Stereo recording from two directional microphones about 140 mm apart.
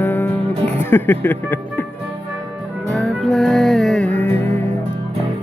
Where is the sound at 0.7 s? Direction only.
15° left (ahead or behind).